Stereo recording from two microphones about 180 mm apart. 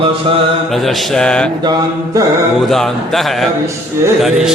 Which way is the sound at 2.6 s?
Centre (ahead or behind).